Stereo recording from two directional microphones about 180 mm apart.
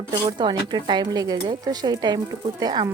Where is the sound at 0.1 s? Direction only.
25° right (ahead or behind).